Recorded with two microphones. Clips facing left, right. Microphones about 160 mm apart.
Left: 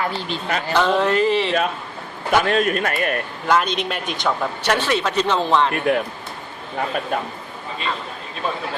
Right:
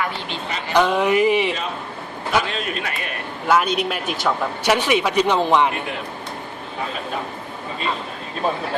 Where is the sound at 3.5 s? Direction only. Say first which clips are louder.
Right 1 dB; 5° right (ahead or behind).